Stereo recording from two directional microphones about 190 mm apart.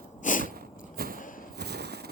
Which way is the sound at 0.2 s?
45° left (ahead or behind).